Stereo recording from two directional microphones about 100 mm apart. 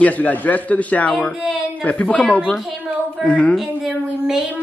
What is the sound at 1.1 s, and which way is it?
Speech, centre (ahead or behind).